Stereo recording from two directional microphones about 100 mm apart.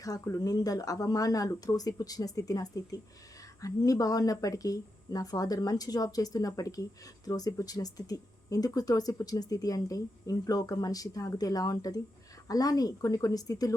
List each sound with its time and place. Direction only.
0.0 s speech: 35° left (ahead or behind)